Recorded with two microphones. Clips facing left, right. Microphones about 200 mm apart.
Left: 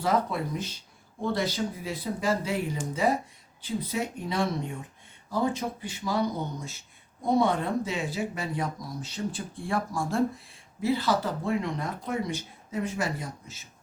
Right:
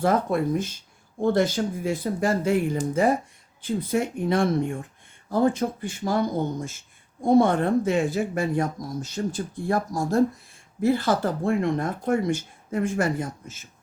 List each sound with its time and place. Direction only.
0.0 s speech: 50° right (ahead or behind)